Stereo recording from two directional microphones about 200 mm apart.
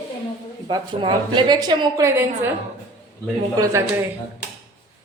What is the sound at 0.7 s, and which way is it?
A woman's voice, 25° right (ahead or behind).